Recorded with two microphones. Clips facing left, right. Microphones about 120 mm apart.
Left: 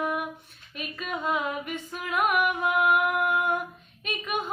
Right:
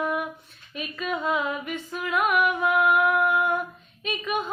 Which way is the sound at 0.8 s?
45° left (ahead or behind).